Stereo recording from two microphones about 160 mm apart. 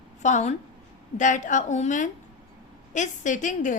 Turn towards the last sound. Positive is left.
turn(degrees=55)  # may be behind; listen again after turning